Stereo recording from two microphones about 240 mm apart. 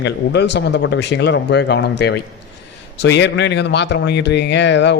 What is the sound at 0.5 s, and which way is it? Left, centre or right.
A man's voice, left.